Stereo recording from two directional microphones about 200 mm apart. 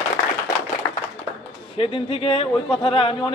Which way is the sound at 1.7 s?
25° left (ahead or behind).